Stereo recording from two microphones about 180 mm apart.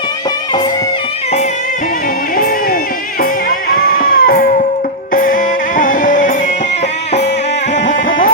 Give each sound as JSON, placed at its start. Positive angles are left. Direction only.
{"t": 3.7, "sound": "sheep", "side_deg": 55}
{"t": 5.1, "sound": "music", "side_deg": 50}